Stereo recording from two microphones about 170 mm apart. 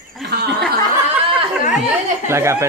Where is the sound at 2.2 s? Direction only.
15° right (ahead or behind).